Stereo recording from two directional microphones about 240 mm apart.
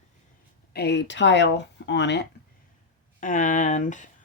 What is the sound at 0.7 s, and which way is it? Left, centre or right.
Speech, left.